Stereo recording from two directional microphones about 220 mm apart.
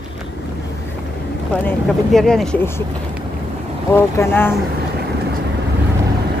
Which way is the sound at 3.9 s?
10° left (ahead or behind).